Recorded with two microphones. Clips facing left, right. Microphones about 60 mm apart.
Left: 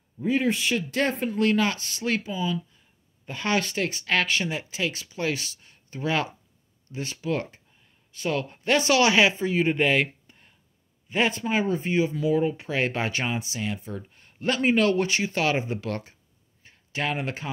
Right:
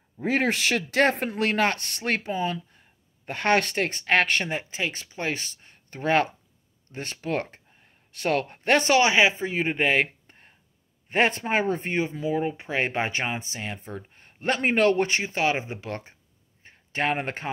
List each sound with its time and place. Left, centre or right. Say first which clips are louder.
0.2 s speech: even; right
8.9 s speech: left 1 dB; right
10.2 s a sound: right 2 dB; right
11.1 s speech: right 2 dB; right
12.1 s speech: left 3 dB; right
16.6 s a sound: right 3 dB; right